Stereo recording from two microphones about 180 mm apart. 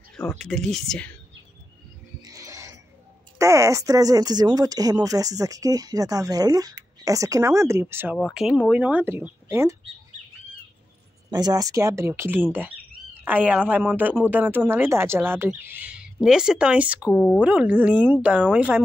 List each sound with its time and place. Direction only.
0.1 s speech: 5° left (ahead or behind)
2.2 s a sound: 20° right (ahead or behind)
3.3 s speech: 15° right (ahead or behind)
11.2 s speech: 20° right (ahead or behind)
17.1 s speech: 10° left (ahead or behind)
17.4 s speech: 10° right (ahead or behind)